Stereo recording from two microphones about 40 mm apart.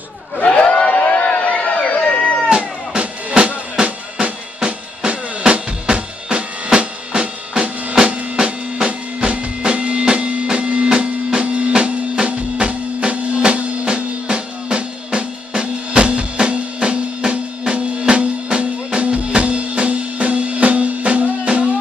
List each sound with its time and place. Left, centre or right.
0.4 s a sound: left
0.9 s music: left
2.5 s music: right